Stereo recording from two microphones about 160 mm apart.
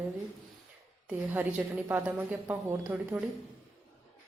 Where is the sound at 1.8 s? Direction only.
10° right (ahead or behind).